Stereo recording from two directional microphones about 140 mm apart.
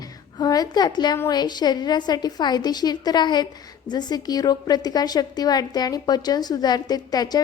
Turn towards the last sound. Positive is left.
turn(degrees=30)  # may be behind; listen again after turning